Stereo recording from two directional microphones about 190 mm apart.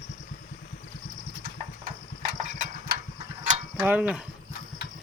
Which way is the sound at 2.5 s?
45° right (ahead or behind).